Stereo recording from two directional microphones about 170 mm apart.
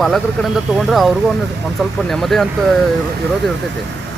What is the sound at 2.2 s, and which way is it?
Speech, centre (ahead or behind).